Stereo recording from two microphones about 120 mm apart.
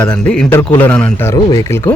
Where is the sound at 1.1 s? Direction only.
25° left (ahead or behind).